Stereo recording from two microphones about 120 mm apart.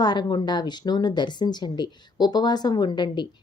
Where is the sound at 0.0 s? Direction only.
35° left (ahead or behind).